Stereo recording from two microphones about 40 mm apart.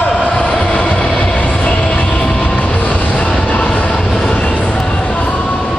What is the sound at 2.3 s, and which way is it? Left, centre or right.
Vehicle, left.